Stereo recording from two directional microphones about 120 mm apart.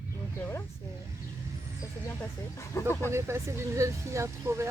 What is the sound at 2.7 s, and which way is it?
Speech, 20° left (ahead or behind).